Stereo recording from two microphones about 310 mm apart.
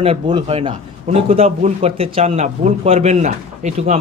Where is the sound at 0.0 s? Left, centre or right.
Centre.